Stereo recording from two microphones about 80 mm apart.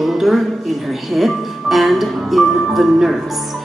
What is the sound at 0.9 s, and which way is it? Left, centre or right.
Speech, centre.